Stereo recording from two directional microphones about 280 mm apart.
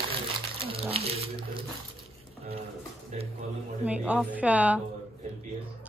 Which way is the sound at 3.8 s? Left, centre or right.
Centre.